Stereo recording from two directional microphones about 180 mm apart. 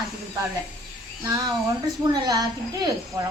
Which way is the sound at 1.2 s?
15° right (ahead or behind).